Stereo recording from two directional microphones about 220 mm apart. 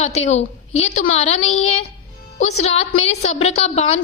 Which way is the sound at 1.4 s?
65° left (ahead or behind).